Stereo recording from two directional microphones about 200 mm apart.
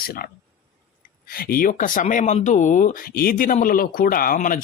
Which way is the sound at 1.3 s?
45° left (ahead or behind).